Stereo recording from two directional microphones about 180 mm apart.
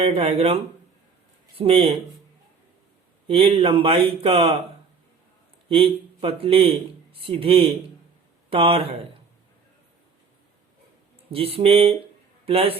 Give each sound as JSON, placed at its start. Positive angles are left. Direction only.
{"t": 0.0, "sound": "speech", "side_deg": -30}
{"t": 3.2, "sound": "speech", "side_deg": -30}
{"t": 5.6, "sound": "speech", "side_deg": -30}
{"t": 11.3, "sound": "speech", "side_deg": -30}